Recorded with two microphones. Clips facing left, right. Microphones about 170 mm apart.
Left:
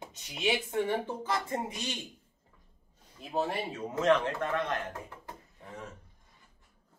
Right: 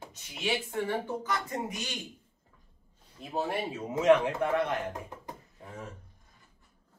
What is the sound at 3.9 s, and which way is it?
Speech, 10° right (ahead or behind).